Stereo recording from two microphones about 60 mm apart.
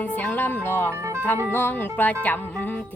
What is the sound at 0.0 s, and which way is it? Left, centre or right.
Speech, left.